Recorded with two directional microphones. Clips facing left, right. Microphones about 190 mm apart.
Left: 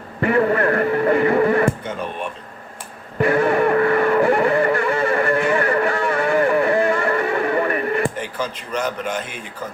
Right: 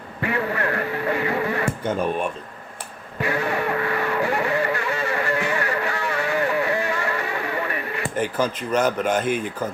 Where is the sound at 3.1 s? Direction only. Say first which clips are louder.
Left 8 dB; 55° left (ahead or behind).